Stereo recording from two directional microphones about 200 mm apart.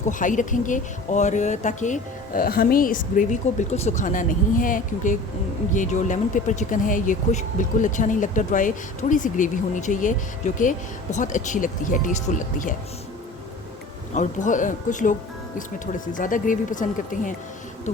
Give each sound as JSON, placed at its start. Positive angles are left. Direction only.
{"t": 0.1, "sound": "speech", "side_deg": 40}
{"t": 14.1, "sound": "speech", "side_deg": 35}